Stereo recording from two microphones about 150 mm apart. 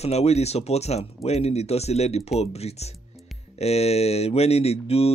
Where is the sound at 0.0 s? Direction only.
45° left (ahead or behind).